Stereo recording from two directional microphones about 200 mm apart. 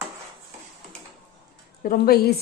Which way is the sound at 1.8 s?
50° left (ahead or behind).